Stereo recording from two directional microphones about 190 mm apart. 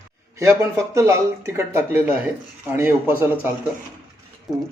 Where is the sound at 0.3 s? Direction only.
15° right (ahead or behind).